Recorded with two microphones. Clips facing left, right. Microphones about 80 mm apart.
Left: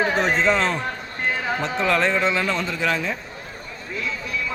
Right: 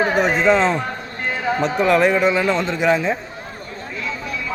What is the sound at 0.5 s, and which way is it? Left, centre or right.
Speech, right.